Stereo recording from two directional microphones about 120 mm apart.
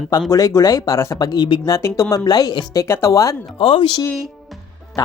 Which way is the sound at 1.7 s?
25° left (ahead or behind).